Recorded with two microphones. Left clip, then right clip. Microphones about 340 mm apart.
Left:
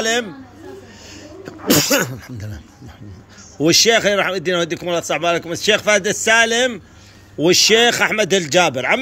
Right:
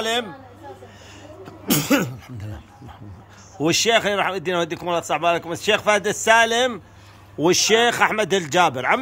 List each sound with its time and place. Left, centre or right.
0.0 s speech: centre